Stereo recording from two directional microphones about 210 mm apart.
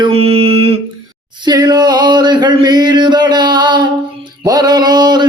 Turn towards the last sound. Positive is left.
turn(degrees=-20)  # may be behind; listen again after turning